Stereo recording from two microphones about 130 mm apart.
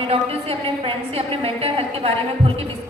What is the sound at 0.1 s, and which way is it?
A woman's voice, 50° right (ahead or behind).